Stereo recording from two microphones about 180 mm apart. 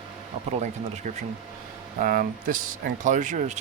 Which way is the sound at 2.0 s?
50° right (ahead or behind).